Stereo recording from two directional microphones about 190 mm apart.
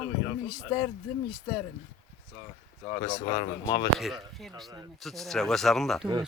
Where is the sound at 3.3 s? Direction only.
20° left (ahead or behind).